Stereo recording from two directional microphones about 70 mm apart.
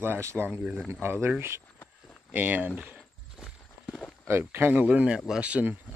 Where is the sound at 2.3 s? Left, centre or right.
Right.